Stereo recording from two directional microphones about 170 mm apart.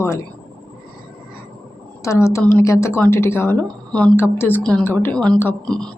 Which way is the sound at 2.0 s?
15° left (ahead or behind).